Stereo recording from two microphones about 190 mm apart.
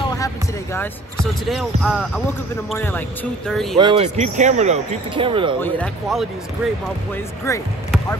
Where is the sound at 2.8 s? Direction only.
10° left (ahead or behind).